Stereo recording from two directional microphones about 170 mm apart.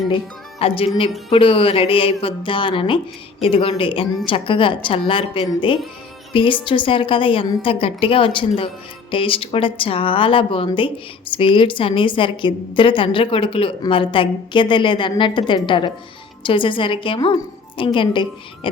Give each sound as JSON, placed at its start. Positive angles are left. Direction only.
{"t": 0.6, "sound": "a woman's voice", "side_deg": 30}